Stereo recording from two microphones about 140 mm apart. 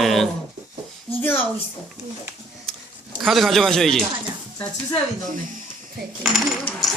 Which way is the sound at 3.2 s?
Centre (ahead or behind).